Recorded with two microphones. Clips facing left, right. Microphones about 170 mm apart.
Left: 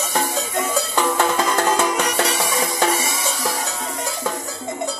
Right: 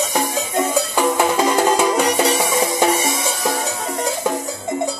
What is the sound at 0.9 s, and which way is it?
Music, 10° right (ahead or behind).